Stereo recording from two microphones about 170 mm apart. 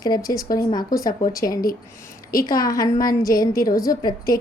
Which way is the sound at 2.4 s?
20° left (ahead or behind).